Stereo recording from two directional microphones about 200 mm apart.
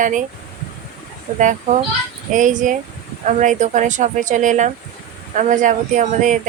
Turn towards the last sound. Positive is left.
turn(degrees=-40)  # may be behind; listen again after turning